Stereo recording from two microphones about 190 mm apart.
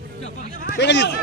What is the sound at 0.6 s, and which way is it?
Speech, 65° left (ahead or behind).